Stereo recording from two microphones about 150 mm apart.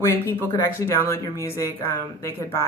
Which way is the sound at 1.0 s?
15° left (ahead or behind).